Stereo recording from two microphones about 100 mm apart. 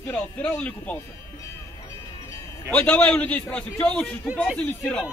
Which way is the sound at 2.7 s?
15° left (ahead or behind).